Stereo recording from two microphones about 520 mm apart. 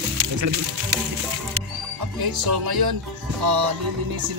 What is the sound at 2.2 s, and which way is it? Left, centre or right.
Speech, right.